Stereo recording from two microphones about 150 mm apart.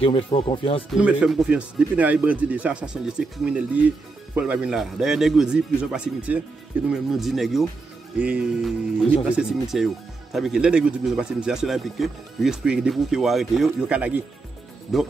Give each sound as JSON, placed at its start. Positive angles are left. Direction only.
{"t": 0.0, "sound": "speech", "side_deg": 35}
{"t": 0.9, "sound": "speech", "side_deg": -5}